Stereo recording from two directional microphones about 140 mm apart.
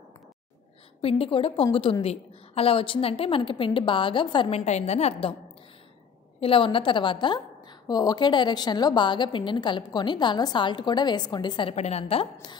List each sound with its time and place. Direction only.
1.0 s a woman's voice: 45° left (ahead or behind)
6.4 s a woman's voice: 40° left (ahead or behind)
11.7 s a woman's voice: 50° left (ahead or behind)